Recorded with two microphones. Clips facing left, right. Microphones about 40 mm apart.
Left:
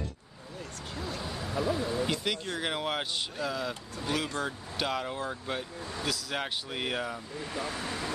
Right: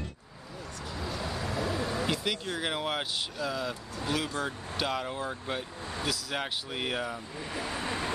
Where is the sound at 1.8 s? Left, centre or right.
Right.